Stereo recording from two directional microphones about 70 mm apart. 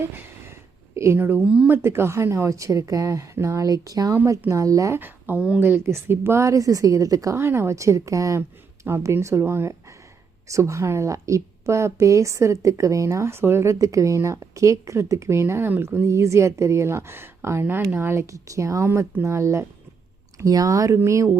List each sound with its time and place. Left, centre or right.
0.9 s speech: right
1.4 s speech: centre
1.7 s a woman's voice: right
4.9 s a woman's voice: right
7.3 s a woman's voice: right
9.1 s a woman's voice: right
20.4 s a woman's voice: right